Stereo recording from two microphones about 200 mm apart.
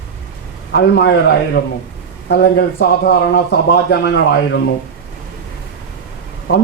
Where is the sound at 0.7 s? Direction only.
60° left (ahead or behind).